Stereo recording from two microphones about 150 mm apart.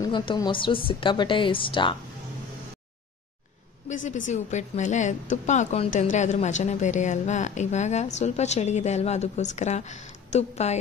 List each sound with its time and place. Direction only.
0.0 s a woman's voice: 30° left (ahead or behind)
3.9 s a woman's voice: 55° left (ahead or behind)